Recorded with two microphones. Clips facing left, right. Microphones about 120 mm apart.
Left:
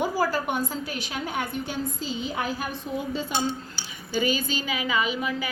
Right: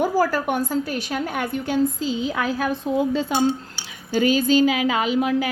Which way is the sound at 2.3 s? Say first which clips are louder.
Right 6 dB; 90° right.